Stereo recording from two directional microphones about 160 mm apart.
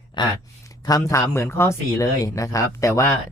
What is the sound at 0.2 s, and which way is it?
Speech, 30° left (ahead or behind).